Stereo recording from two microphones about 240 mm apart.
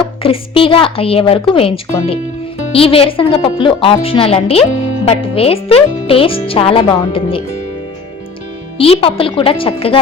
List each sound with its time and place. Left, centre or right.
0.2 s speech: left
8.8 s speech: left